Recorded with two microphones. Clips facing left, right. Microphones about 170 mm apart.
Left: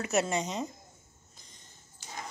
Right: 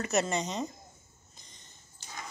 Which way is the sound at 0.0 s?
5° left (ahead or behind).